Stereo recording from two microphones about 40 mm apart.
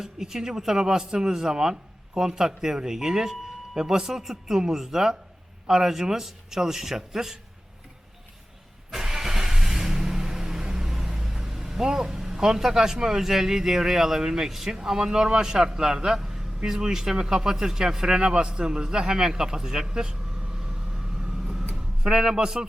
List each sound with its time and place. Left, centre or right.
0.0 s speech: centre
8.9 s vehicle: centre
16.6 s speech: centre
21.4 s a sound: centre
22.0 s speech: centre